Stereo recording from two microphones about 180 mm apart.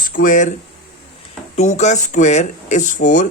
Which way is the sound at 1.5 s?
40° left (ahead or behind).